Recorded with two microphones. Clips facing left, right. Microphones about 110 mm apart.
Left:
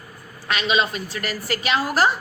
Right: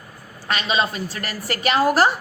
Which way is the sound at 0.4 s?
35° right (ahead or behind).